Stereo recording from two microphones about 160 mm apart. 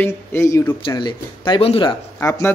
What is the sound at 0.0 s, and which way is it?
Speech, 15° left (ahead or behind).